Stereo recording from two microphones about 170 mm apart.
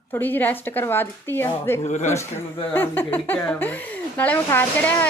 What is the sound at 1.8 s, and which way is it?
Speech, 40° left (ahead or behind).